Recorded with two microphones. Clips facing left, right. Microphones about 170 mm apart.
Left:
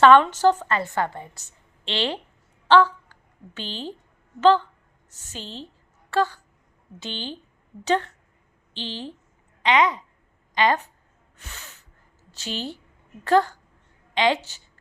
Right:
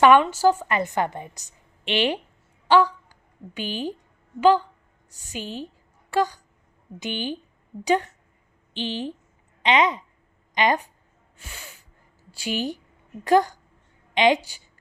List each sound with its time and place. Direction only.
0.0 s a woman's voice: 10° right (ahead or behind)
2.6 s a sound: 10° right (ahead or behind)
4.4 s a woman's voice: 10° right (ahead or behind)